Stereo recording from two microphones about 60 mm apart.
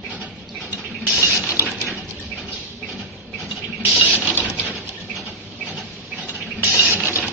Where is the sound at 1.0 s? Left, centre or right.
Right.